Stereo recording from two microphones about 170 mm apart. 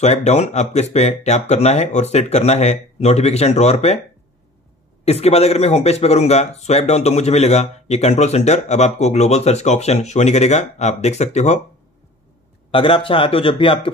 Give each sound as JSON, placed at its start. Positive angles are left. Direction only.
{"t": 0.0, "sound": "a man's voice", "side_deg": 40}
{"t": 5.0, "sound": "a man's voice", "side_deg": 40}
{"t": 12.7, "sound": "a man's voice", "side_deg": 30}